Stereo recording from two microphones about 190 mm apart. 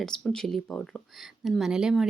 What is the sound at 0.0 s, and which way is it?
Speech, 5° left (ahead or behind).